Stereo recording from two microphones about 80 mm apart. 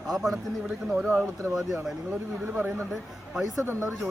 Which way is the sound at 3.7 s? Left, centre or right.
Right.